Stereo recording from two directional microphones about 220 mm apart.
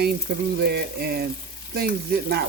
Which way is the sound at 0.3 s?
50° right (ahead or behind).